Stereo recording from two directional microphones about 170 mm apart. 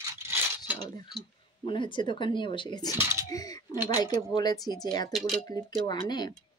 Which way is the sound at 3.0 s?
15° right (ahead or behind).